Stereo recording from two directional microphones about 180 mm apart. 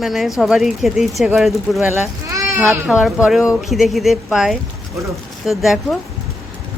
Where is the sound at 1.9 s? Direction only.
20° right (ahead or behind).